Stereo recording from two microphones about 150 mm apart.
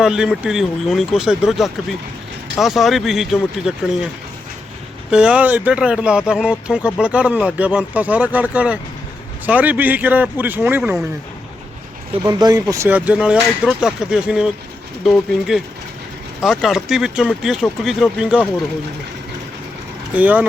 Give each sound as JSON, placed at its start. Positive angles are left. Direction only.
{"t": 0.0, "sound": "speech", "side_deg": -5}
{"t": 5.1, "sound": "speech", "side_deg": -5}
{"t": 12.1, "sound": "speech", "side_deg": -25}
{"t": 12.7, "sound": "speech", "side_deg": -15}
{"t": 20.1, "sound": "speech", "side_deg": -10}